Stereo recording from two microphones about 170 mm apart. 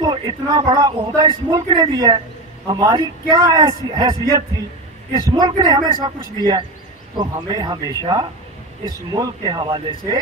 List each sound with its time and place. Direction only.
0.0 s speech: 25° right (ahead or behind)